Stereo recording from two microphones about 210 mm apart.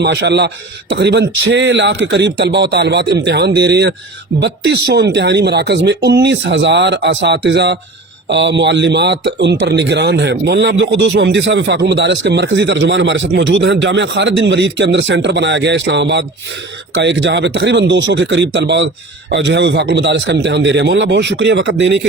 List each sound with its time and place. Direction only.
0.0 s speech: 55° right (ahead or behind)